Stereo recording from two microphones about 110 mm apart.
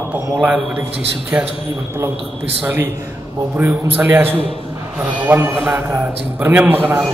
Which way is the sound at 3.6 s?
20° right (ahead or behind).